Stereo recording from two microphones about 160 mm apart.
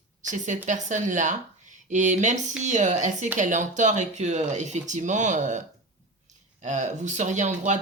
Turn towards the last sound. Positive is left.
turn(degrees=-50)  # may be behind; listen again after turning